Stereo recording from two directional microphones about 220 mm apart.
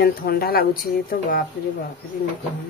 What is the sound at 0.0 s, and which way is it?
Speech, 45° left (ahead or behind).